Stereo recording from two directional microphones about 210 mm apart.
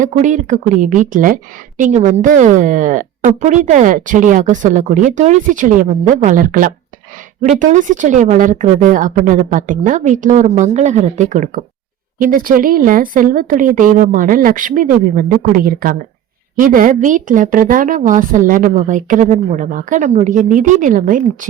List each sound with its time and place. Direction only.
0.0 s a woman's voice: 35° right (ahead or behind)